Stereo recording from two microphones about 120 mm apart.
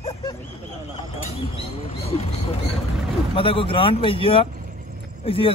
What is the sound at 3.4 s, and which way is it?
Speech, 50° left (ahead or behind).